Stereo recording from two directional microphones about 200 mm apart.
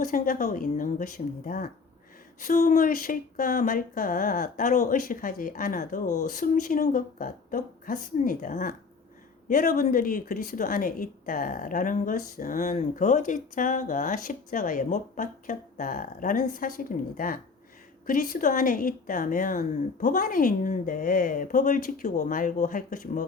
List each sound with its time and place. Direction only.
0.0 s a woman's voice: 40° left (ahead or behind)